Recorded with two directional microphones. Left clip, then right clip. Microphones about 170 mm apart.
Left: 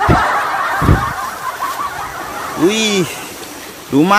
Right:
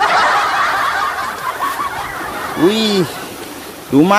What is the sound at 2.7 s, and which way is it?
Speech, 5° right (ahead or behind).